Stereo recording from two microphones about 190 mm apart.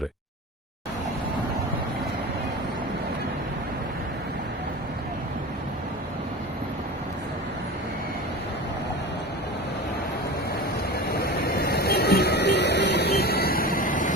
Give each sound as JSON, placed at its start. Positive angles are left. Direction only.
{"t": 11.1, "sound": "vehicle", "side_deg": 55}